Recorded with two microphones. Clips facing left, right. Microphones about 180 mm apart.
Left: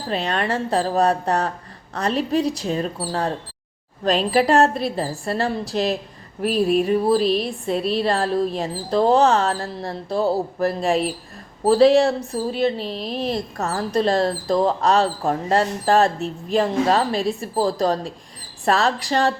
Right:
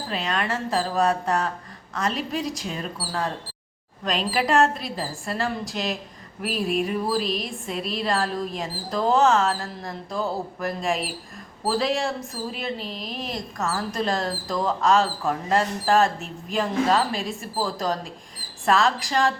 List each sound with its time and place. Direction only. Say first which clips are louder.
0.1 s a woman's voice: left 5 dB; 35° left (ahead or behind)